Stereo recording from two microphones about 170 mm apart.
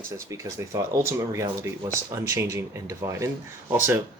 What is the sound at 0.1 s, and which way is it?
Speech, 20° right (ahead or behind).